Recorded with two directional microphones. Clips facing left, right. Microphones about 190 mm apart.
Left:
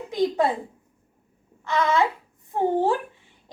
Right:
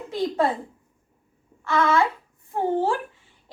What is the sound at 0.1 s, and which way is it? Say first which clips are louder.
Speech: left 1 dB; 15° left (ahead or behind).